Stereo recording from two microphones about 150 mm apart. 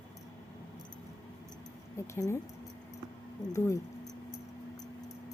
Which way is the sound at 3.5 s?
20° left (ahead or behind).